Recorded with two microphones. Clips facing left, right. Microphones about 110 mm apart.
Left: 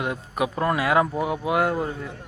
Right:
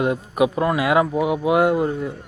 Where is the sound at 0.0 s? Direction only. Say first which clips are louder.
Right 7 dB; 20° right (ahead or behind).